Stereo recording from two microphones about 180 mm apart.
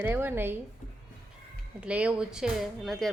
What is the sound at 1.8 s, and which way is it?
A woman's voice, 5° right (ahead or behind).